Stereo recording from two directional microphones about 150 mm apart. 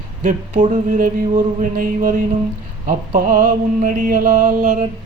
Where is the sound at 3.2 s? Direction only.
60° right (ahead or behind).